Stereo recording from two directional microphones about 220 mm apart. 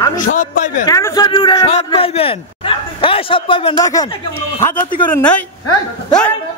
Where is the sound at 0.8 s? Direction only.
15° left (ahead or behind).